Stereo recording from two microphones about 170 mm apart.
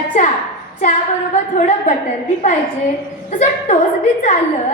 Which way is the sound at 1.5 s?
45° left (ahead or behind).